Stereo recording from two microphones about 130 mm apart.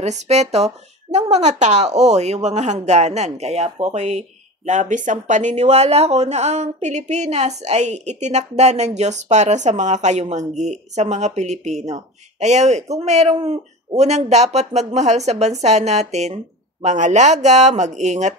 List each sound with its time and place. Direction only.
0.0 s speech: 60° right (ahead or behind)